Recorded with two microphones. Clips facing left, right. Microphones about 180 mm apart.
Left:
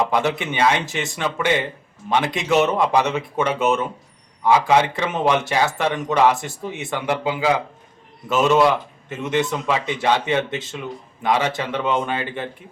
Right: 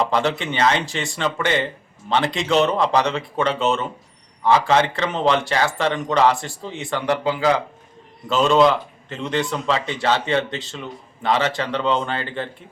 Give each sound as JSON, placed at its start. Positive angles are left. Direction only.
{"t": 0.0, "sound": "speech", "side_deg": 15}